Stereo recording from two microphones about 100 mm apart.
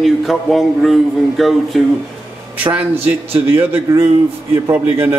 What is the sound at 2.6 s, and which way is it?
Speech, 20° right (ahead or behind).